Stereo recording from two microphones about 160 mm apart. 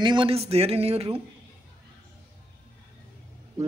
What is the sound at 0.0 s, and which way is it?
Speech, 30° right (ahead or behind).